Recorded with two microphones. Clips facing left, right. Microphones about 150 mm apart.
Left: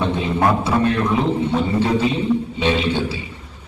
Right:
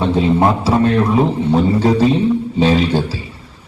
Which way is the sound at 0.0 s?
25° right (ahead or behind).